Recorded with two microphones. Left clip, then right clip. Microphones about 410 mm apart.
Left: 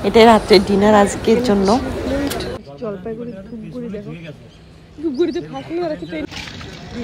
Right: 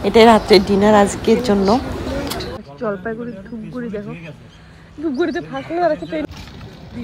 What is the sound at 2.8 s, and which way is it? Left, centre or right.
Speech, centre.